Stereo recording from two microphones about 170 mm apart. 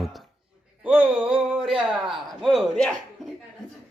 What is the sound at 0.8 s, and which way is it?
Music, 5° right (ahead or behind).